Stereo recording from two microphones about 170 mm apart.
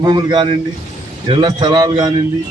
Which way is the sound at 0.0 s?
25° right (ahead or behind).